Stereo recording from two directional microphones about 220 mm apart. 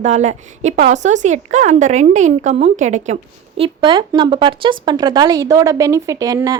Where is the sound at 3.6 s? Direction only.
20° right (ahead or behind).